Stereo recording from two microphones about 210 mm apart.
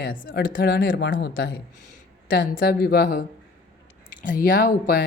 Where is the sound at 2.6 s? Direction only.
45° left (ahead or behind).